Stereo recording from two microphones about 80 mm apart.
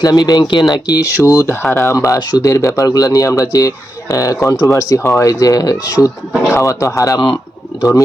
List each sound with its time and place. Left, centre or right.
0.0 s speech: left
1.2 s speech: left
5.3 s speech: left